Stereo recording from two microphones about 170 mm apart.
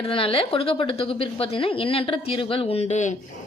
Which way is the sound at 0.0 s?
30° left (ahead or behind).